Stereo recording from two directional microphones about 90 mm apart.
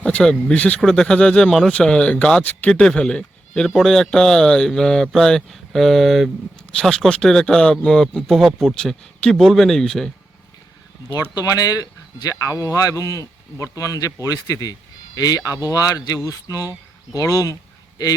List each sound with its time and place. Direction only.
0.0 s speech: 10° left (ahead or behind)
11.3 s speech: 45° left (ahead or behind)